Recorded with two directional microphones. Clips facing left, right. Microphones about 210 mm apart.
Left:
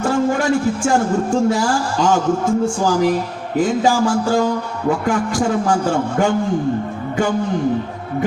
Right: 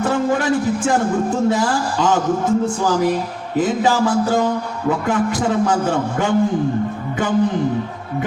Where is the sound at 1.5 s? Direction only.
20° right (ahead or behind).